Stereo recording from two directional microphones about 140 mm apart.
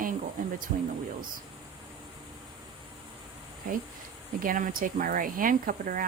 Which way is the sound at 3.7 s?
80° right.